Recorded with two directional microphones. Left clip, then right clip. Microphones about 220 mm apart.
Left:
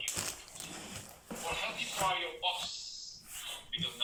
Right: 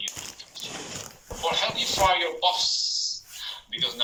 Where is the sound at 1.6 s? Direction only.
35° right (ahead or behind).